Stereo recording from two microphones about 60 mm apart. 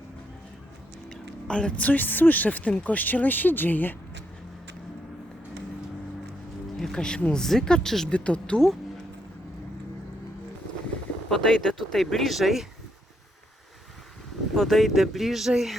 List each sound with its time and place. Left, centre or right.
1.1 s speech: centre
6.7 s a sound: centre
7.3 s speech: centre
11.3 s speech: centre
14.5 s speech: centre